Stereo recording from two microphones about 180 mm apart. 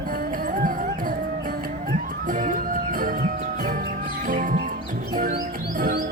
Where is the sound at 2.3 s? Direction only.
45° right (ahead or behind).